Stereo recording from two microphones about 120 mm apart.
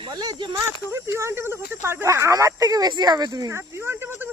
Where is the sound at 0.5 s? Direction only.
25° right (ahead or behind).